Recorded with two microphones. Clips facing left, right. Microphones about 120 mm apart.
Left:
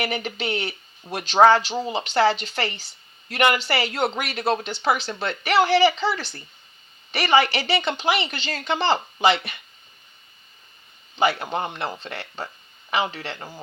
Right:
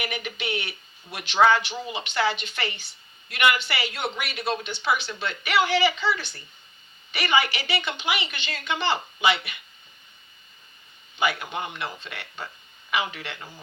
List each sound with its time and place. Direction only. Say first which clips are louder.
0.0 s speech: left 5 dB; 35° left (ahead or behind)
11.2 s speech: left 5 dB; 35° left (ahead or behind)